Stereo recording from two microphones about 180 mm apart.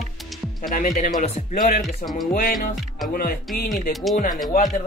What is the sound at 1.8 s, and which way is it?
Speech, centre (ahead or behind).